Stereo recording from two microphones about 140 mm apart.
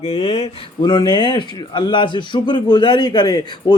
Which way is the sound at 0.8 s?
30° left (ahead or behind).